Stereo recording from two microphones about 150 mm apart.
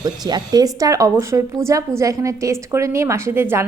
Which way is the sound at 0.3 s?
25° right (ahead or behind).